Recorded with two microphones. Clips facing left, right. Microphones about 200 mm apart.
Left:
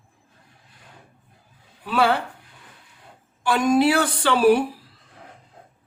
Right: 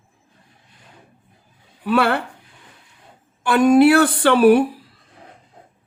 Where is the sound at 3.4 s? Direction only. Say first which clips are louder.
Right 6 dB; 60° right (ahead or behind).